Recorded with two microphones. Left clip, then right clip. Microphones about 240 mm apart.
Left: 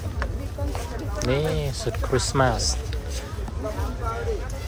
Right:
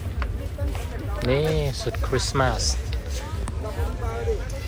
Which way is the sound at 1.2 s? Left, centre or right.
Centre.